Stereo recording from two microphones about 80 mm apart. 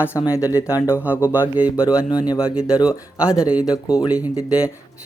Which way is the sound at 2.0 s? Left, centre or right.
Left.